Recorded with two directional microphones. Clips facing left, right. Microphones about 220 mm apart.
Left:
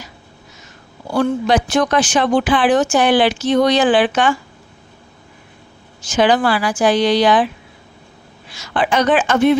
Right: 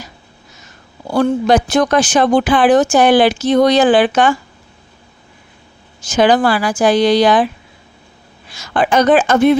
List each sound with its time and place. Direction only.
1.1 s speech: 40° right (ahead or behind)
6.1 s speech: 40° right (ahead or behind)
8.5 s speech: 45° right (ahead or behind)